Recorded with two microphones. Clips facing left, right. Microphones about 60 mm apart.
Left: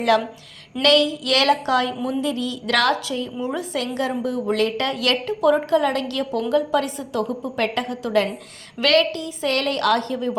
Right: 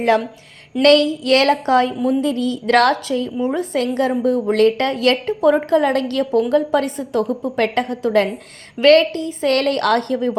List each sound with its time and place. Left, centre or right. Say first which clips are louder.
0.8 s a woman's voice: right 5 dB; right